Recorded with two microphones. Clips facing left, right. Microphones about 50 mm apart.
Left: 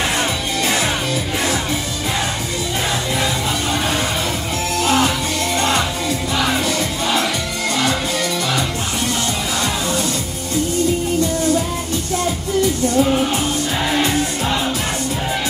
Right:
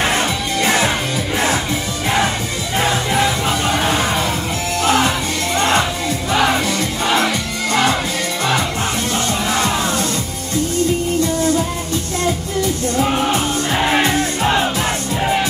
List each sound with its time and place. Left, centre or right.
0.7 s music: right
3.2 s music: right
13.0 s music: right
13.7 s music: right